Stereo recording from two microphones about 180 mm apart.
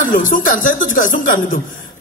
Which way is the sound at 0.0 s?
50° left (ahead or behind).